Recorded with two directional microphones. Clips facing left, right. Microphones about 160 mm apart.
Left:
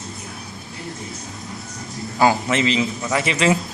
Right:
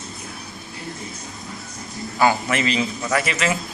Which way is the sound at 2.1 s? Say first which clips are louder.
Left 2 dB; 25° left (ahead or behind).